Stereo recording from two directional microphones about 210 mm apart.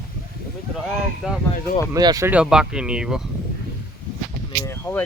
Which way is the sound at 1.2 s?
5° right (ahead or behind).